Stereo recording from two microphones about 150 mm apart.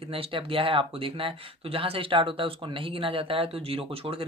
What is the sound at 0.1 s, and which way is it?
Speech, 35° right (ahead or behind).